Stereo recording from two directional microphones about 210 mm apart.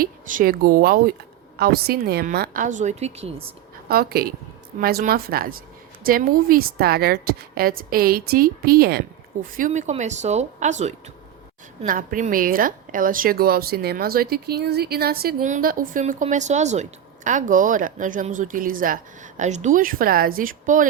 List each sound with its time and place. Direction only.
0.0 s a woman's voice: 40° right (ahead or behind)
3.8 s a woman's voice: 45° right (ahead or behind)